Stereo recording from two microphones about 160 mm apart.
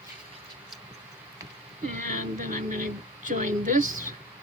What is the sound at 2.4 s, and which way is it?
A woman's voice, 55° right (ahead or behind).